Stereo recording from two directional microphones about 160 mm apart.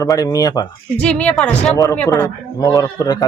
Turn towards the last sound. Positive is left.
turn(degrees=20)  # may be behind; listen again after turning